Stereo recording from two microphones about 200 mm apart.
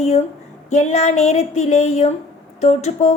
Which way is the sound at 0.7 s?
35° left (ahead or behind).